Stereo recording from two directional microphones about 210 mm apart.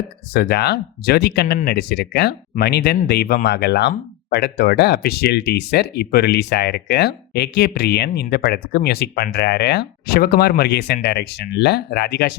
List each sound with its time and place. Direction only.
0.3 s speech: 50° left (ahead or behind)